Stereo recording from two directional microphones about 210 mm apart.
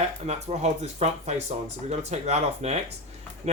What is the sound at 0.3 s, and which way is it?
Speech, 30° right (ahead or behind).